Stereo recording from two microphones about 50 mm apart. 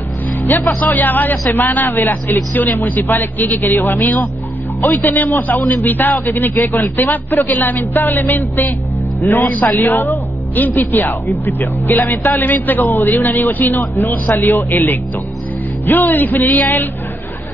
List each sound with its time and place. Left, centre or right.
0.4 s speech: left
7.8 s music: left
10.5 s speech: left
14.3 s music: left
14.7 s speech: left